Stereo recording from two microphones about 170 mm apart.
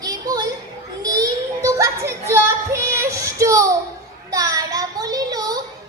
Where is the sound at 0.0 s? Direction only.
25° right (ahead or behind).